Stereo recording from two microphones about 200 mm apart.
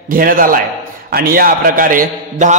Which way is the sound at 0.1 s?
45° right (ahead or behind).